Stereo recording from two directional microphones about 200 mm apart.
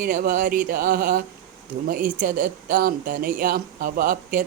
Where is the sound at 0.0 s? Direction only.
45° right (ahead or behind).